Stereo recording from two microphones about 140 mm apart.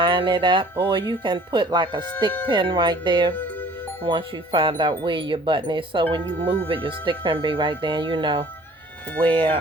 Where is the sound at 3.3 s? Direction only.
15° left (ahead or behind).